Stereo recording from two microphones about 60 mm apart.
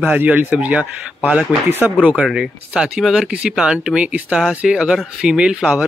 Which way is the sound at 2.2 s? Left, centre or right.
Centre.